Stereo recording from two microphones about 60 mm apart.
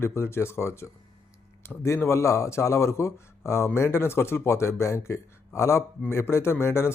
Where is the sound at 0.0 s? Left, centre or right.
Left.